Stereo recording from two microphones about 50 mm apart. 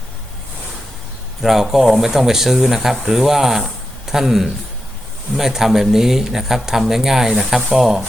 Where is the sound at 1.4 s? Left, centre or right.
Centre.